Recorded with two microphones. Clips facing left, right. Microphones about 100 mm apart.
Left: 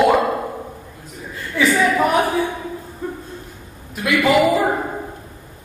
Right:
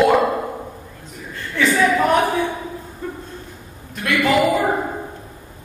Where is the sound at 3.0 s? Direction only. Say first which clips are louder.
Left 2 dB; 15° left (ahead or behind).